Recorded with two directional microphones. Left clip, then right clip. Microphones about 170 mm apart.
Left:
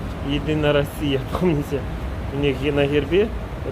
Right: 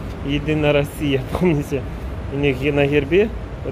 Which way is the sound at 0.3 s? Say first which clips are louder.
Right 2 dB; 20° right (ahead or behind).